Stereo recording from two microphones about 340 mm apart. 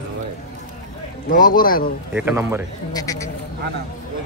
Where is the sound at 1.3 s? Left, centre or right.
Left.